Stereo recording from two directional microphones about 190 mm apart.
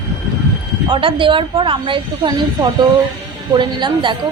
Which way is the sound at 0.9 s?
25° right (ahead or behind).